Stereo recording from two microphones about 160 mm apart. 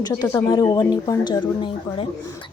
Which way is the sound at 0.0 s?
20° left (ahead or behind).